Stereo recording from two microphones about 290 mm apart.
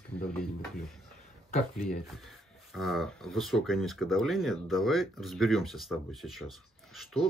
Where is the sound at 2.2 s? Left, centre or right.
Centre.